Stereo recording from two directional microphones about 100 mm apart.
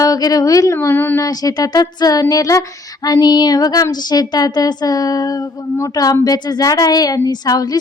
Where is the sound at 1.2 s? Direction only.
40° left (ahead or behind).